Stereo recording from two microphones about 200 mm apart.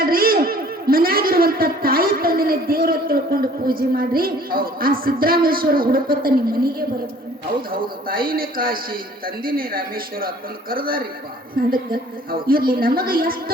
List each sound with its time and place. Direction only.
0.0 s a man's voice: 45° right (ahead or behind)